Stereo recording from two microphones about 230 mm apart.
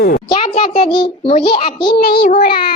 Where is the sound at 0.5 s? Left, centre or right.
Centre.